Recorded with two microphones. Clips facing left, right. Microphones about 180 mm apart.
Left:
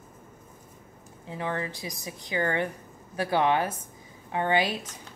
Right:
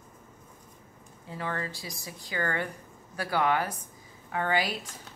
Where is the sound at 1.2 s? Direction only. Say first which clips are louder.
Left 3 dB; 20° left (ahead or behind).